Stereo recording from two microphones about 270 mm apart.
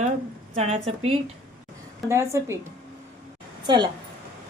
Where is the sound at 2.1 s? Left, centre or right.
Centre.